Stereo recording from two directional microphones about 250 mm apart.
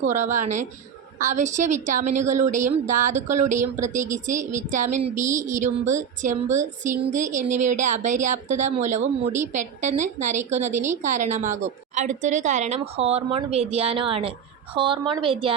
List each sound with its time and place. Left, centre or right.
0.0 s a woman's voice: right